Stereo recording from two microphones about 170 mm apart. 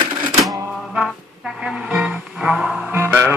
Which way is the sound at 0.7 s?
Centre (ahead or behind).